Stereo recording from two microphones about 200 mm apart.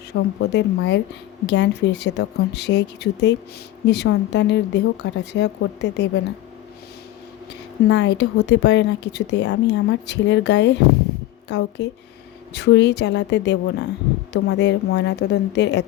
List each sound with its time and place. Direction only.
0.2 s a woman's voice: 65° left (ahead or behind)
7.9 s a woman's voice: 60° left (ahead or behind)